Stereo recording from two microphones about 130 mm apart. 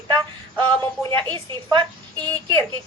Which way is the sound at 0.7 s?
35° right (ahead or behind).